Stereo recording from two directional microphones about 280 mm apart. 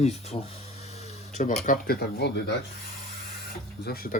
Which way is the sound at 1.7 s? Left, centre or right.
Left.